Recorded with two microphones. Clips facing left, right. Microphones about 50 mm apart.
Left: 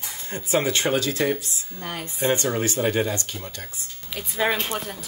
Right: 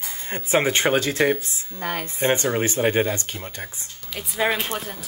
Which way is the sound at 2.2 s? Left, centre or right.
Right.